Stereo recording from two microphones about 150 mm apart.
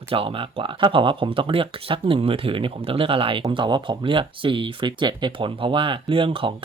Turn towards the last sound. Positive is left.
turn(degrees=-35)  # may be behind; listen again after turning